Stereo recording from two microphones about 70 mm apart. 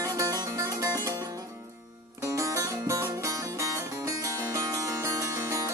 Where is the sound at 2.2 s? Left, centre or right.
Right.